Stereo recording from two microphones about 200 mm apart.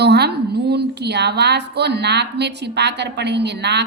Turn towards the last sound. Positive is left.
turn(degrees=-60)  # may be behind; listen again after turning